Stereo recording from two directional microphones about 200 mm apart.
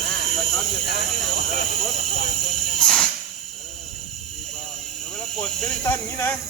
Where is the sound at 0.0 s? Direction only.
Centre (ahead or behind).